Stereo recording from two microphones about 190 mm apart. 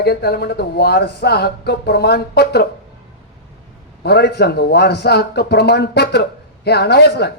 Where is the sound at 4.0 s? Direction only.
60° left (ahead or behind).